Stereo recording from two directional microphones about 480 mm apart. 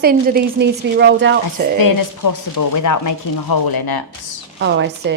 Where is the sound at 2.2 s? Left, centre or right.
Left.